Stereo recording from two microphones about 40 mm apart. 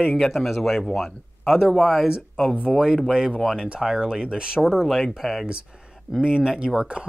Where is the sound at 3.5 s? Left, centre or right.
Right.